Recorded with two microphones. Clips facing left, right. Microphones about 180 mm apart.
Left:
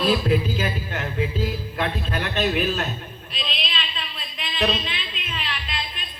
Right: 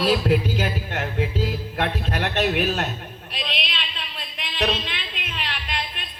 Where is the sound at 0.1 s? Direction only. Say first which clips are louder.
Right 1 dB; 70° right (ahead or behind).